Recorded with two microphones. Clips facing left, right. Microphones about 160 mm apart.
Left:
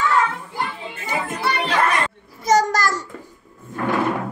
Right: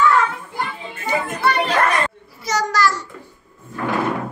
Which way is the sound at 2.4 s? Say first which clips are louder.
Left 2 dB; 45° left (ahead or behind).